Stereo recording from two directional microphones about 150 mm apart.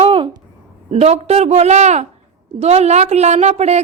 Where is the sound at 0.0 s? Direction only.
35° right (ahead or behind).